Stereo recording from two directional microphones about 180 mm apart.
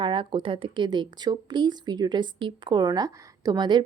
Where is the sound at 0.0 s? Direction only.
30° right (ahead or behind).